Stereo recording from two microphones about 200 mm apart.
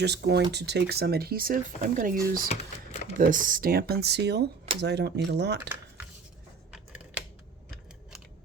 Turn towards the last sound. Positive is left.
turn(degrees=-5)  # may be behind; listen again after turning